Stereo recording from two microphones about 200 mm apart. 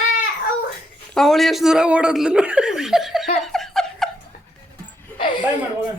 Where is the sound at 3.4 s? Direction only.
Centre (ahead or behind).